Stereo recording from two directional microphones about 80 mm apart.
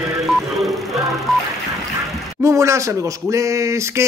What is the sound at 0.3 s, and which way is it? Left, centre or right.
Music, centre.